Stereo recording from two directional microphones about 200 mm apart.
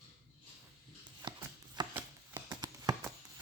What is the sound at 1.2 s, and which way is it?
Chopping, 20° right (ahead or behind).